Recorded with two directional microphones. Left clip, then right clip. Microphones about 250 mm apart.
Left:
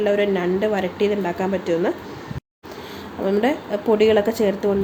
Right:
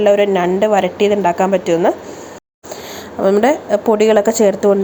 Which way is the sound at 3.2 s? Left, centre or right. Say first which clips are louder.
Right 8 dB; centre.